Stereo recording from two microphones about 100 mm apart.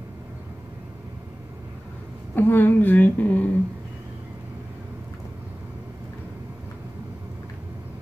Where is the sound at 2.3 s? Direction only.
20° left (ahead or behind).